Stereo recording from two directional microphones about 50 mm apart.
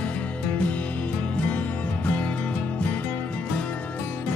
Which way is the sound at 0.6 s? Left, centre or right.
Left.